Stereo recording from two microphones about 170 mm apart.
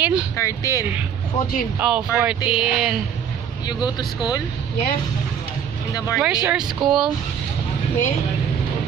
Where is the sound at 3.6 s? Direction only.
25° left (ahead or behind).